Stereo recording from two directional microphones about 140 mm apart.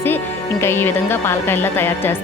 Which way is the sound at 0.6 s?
15° left (ahead or behind).